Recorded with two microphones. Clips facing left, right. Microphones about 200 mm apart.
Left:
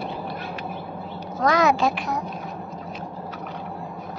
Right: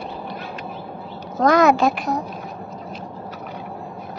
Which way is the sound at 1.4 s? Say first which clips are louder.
Right 5 dB; 55° right (ahead or behind).